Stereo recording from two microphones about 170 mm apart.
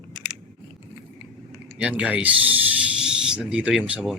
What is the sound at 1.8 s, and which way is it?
Speech, 5° right (ahead or behind).